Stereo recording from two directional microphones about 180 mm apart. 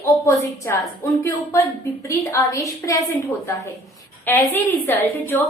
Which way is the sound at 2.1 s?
15° left (ahead or behind).